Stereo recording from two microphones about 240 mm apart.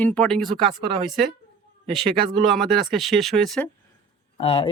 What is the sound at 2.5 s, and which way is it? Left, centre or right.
Speech, centre.